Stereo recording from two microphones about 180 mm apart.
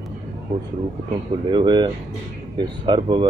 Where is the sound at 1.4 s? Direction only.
25° right (ahead or behind).